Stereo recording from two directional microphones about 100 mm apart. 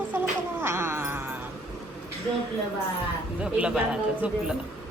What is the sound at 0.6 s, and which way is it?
Cat, 25° right (ahead or behind).